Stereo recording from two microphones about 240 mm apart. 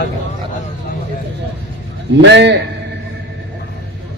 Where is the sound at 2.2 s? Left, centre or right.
Right.